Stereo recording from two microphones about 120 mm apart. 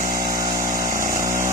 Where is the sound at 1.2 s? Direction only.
90° right.